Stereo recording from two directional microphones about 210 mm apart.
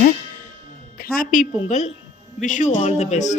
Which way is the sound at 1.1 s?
35° left (ahead or behind).